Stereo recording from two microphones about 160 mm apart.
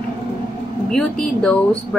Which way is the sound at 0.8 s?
5° left (ahead or behind).